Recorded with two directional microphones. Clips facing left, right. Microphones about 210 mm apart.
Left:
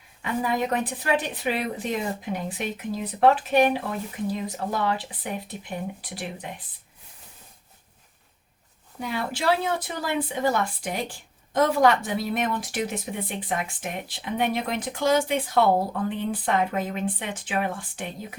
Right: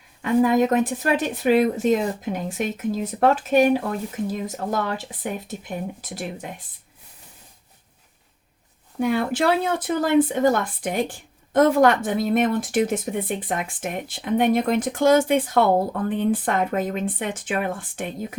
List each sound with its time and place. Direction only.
0.2 s speech: 45° right (ahead or behind)
9.0 s speech: 50° right (ahead or behind)